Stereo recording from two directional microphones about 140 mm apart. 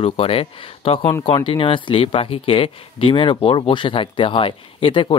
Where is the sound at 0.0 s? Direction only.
45° left (ahead or behind).